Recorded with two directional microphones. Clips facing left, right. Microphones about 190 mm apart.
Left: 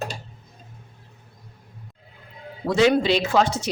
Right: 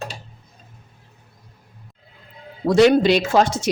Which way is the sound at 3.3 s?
45° right (ahead or behind).